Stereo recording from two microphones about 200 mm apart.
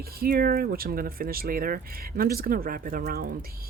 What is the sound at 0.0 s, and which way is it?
Speech, 50° right (ahead or behind).